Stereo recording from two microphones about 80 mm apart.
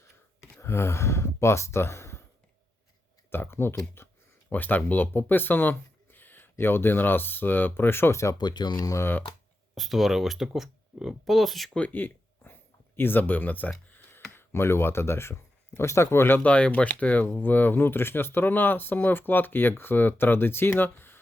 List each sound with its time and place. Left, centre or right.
0.6 s speech: left
3.2 s speech: left
4.0 s a sound: left
4.4 s speech: left
8.4 s speech: left
9.0 s speech: left
9.7 s speech: centre
11.7 s speech: centre
16.5 s speech: centre